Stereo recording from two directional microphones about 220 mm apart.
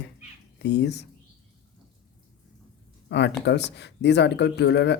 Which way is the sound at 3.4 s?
50° left (ahead or behind).